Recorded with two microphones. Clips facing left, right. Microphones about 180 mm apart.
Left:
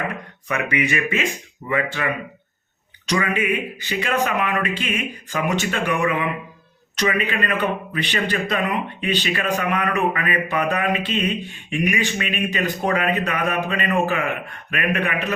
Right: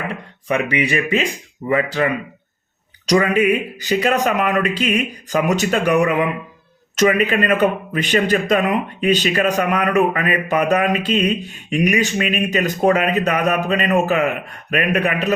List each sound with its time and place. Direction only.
0.1 s a man's voice: 30° right (ahead or behind)
3.1 s a man's voice: 40° right (ahead or behind)